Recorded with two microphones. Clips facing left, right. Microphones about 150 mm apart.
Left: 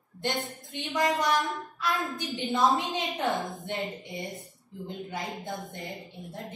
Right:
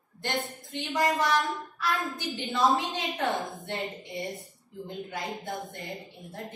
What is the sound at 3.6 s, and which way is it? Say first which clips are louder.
Speech: left 1 dB; 20° left (ahead or behind).